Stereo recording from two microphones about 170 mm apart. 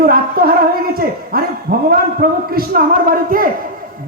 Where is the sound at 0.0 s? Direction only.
60° right (ahead or behind).